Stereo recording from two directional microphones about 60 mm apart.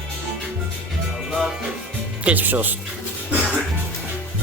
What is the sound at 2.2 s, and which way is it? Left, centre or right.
Speech, right.